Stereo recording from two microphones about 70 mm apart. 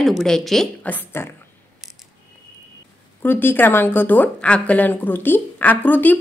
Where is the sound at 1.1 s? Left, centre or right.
Left.